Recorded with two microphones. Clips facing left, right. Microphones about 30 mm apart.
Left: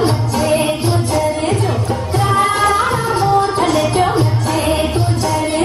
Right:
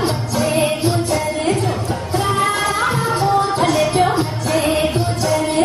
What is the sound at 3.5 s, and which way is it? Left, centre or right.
Music, centre.